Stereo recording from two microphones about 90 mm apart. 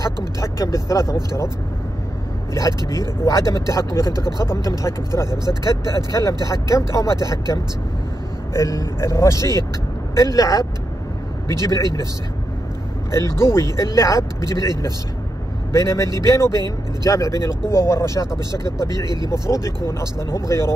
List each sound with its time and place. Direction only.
0.4 s speech: 35° left (ahead or behind)
2.5 s speech: 40° left (ahead or behind)
13.1 s speech: 30° left (ahead or behind)
15.7 s speech: 35° left (ahead or behind)
18.9 s speech: 55° right (ahead or behind)
19.9 s speech: 30° left (ahead or behind)